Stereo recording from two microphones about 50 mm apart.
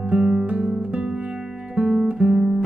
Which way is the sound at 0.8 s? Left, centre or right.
Centre.